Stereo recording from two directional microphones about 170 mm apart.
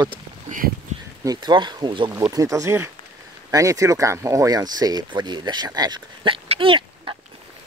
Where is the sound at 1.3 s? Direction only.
25° right (ahead or behind).